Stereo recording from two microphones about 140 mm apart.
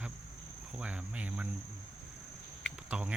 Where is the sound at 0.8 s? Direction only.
10° right (ahead or behind).